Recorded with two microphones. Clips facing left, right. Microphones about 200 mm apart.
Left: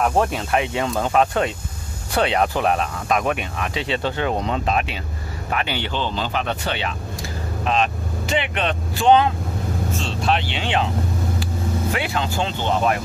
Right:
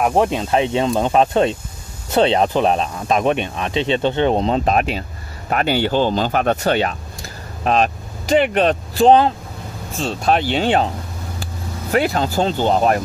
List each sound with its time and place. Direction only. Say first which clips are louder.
0.0 s speech: right 3 dB; 20° right (ahead or behind)
4.6 s speech: right 5 dB; 40° right (ahead or behind)
11.9 s speech: right 6 dB; 40° right (ahead or behind)